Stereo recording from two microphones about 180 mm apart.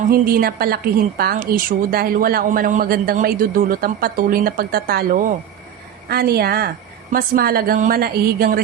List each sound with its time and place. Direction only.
0.1 s a woman's voice: 55° right (ahead or behind)